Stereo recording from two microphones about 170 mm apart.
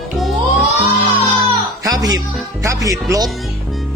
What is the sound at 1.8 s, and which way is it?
Speech, 20° right (ahead or behind).